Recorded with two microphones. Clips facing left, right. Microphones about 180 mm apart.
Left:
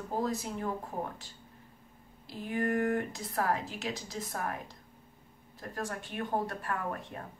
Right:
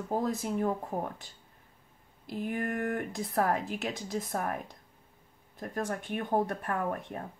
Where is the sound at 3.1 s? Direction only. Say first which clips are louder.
Right 3 dB; 55° right (ahead or behind).